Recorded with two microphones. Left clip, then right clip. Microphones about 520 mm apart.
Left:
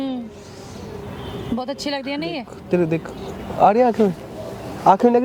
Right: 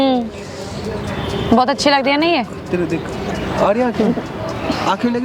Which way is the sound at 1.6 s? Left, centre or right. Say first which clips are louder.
Right 13 dB; right.